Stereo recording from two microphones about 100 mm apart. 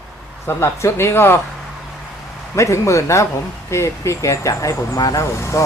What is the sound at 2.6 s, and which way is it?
Speech, 30° left (ahead or behind).